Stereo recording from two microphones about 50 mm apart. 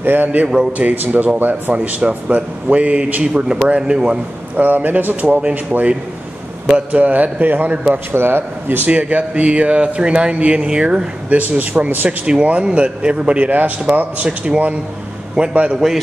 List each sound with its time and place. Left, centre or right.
0.0 s a man's voice: right
3.3 s speech: centre
4.6 s a man's voice: right
7.9 s speech: right
8.9 s a man's voice: right
11.2 s a man's voice: right
12.3 s a man's voice: right